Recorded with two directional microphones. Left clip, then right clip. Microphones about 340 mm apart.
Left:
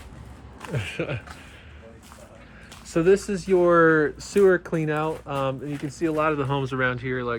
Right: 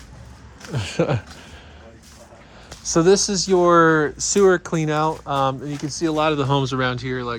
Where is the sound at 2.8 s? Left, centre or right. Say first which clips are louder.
Right 4 dB; centre.